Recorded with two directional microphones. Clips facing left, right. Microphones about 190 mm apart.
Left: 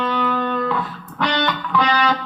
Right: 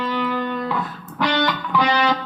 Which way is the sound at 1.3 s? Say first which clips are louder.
Right 1 dB; 10° right (ahead or behind).